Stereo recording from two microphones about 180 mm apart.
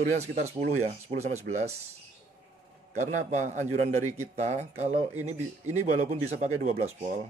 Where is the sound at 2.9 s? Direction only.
40° right (ahead or behind).